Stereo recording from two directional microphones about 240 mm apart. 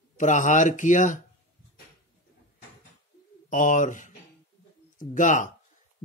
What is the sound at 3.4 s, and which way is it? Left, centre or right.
Speech, left.